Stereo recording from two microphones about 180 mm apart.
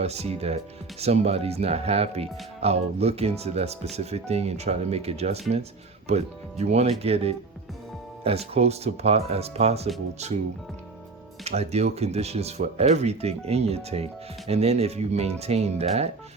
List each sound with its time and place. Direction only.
0.0 s speech: 35° right (ahead or behind)
11.4 s speech: 35° right (ahead or behind)